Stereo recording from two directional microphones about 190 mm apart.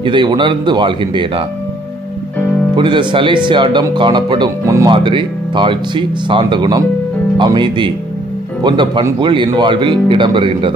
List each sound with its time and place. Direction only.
0.0 s speech: 25° right (ahead or behind)
2.7 s speech: 25° right (ahead or behind)